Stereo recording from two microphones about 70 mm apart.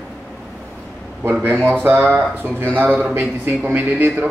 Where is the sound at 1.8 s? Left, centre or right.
Right.